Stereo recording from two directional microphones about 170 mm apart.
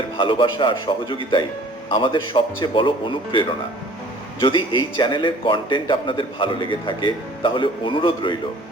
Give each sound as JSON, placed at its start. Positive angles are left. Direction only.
{"t": 0.2, "sound": "a man's voice", "side_deg": 30}
{"t": 4.4, "sound": "a man's voice", "side_deg": 30}